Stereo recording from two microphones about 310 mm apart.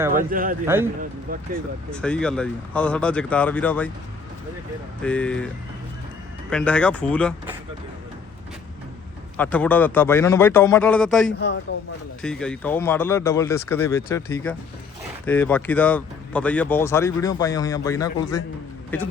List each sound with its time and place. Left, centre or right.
0.1 s speech: right
0.6 s speech: centre
1.3 s speech: right
1.9 s speech: centre
5.0 s speech: centre
6.5 s speech: centre
9.4 s speech: centre
11.3 s a man's voice: left
12.2 s speech: centre